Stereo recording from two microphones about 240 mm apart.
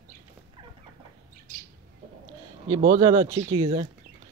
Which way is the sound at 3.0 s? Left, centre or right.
Centre.